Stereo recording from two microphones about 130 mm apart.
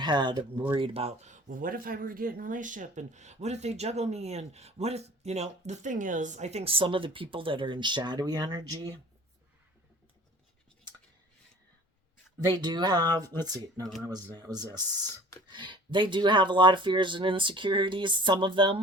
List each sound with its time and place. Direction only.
0.0 s speech: 35° right (ahead or behind)
12.5 s speech: 35° right (ahead or behind)